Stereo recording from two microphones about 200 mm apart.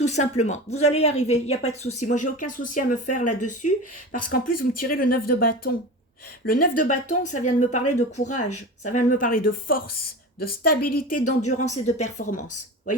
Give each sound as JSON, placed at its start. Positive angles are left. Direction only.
{"t": 0.0, "sound": "speech", "side_deg": 35}